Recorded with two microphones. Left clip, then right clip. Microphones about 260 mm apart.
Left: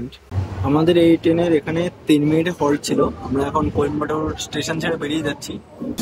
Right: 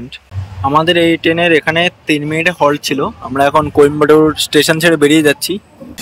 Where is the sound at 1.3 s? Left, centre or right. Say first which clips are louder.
Right 7 dB; right.